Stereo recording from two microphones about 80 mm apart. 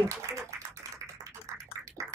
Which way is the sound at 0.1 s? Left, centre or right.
Right.